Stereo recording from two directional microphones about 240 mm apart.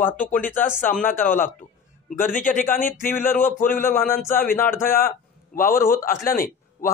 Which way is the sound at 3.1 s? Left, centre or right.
Centre.